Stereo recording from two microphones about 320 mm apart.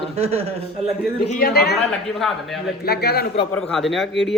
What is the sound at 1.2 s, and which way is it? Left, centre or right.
Speech, left.